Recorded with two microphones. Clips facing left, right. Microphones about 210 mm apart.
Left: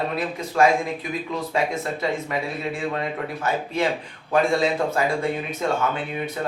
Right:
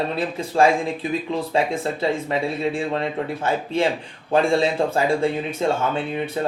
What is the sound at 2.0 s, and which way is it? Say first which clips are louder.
Speech: right 5 dB; 30° right (ahead or behind).